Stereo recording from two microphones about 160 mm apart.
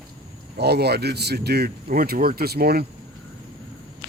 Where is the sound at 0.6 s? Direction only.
90° right; by 2.9 s 75° right (ahead or behind).